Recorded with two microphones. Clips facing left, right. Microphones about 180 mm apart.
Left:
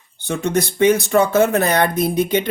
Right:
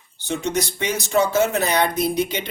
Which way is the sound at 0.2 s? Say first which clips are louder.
Left 4 dB; 55° left (ahead or behind).